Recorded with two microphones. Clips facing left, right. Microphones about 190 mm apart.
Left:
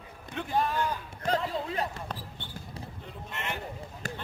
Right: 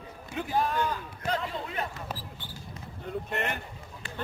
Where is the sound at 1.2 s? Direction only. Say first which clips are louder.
Left 3 dB; 35° left (ahead or behind).